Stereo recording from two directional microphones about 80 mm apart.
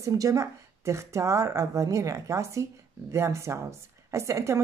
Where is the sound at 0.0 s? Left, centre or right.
Right.